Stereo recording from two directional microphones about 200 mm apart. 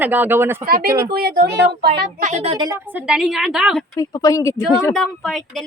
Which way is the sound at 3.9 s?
15° left (ahead or behind).